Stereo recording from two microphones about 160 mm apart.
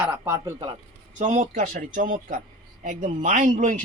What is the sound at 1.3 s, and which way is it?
Speech, 50° right (ahead or behind).